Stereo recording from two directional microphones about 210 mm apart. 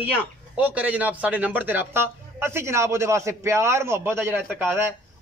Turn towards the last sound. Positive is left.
turn(degrees=-10)  # may be behind; listen again after turning